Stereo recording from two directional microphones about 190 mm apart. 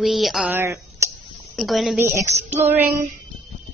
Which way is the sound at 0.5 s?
15° right (ahead or behind).